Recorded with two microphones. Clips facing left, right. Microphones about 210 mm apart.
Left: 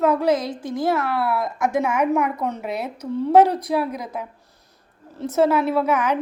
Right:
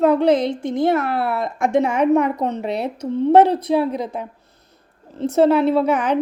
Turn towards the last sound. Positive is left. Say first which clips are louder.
# right 3 dB
turn(degrees=-30)  # may be behind; listen again after turning